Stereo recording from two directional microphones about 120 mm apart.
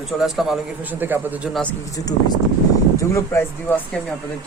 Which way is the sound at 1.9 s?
30° left (ahead or behind).